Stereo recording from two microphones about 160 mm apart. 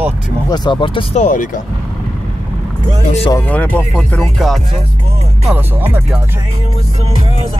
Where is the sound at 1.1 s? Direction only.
55° left (ahead or behind).